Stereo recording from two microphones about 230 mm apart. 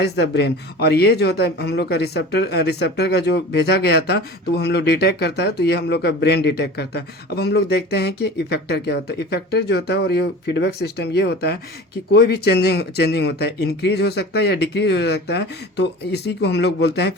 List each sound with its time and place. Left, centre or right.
0.0 s speech: left